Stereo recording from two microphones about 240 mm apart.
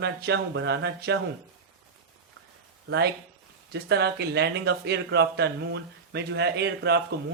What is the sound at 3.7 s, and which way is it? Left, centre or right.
Speech, right.